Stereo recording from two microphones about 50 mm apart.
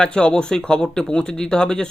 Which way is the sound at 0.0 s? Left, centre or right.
Centre.